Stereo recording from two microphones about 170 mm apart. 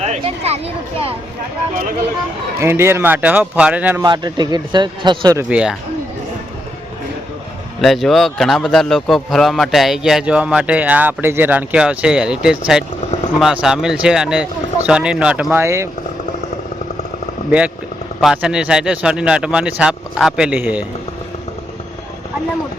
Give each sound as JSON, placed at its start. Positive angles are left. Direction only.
{"t": 0.0, "sound": "speech", "side_deg": -40}
{"t": 2.6, "sound": "speech", "side_deg": -15}
{"t": 4.0, "sound": "a man's voice", "side_deg": -25}
{"t": 5.5, "sound": "speech", "side_deg": -5}
{"t": 7.8, "sound": "a man's voice", "side_deg": 0}
{"t": 18.2, "sound": "a man's voice", "side_deg": -5}